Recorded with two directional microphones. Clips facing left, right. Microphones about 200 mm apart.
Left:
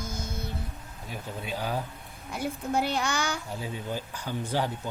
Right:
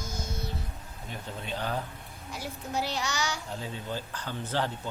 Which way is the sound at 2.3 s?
55° left (ahead or behind).